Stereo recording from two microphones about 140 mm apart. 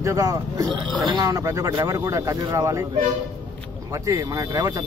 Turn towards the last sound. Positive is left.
turn(degrees=-25)  # may be behind; listen again after turning